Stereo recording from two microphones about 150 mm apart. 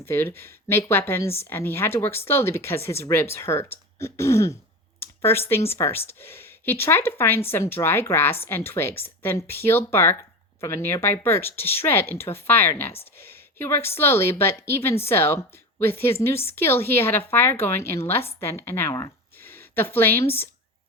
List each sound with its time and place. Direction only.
0.0 s a woman's voice: 15° left (ahead or behind)